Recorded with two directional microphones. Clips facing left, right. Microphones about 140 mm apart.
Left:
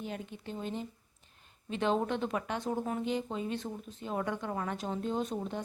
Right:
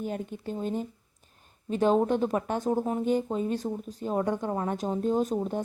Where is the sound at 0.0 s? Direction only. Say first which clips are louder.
Right 7 dB; 45° right (ahead or behind).